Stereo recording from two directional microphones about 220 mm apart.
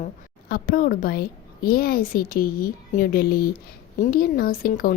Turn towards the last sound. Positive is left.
turn(degrees=40)  # may be behind; listen again after turning